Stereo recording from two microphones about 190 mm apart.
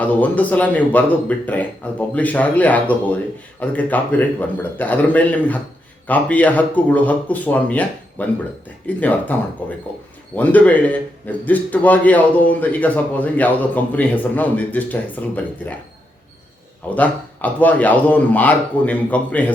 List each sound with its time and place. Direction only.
0.0 s a man's voice: 10° left (ahead or behind)
16.9 s a man's voice: 10° left (ahead or behind)